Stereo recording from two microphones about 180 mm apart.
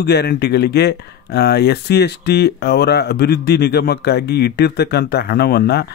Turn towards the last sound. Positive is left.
turn(degrees=65)  # may be behind; listen again after turning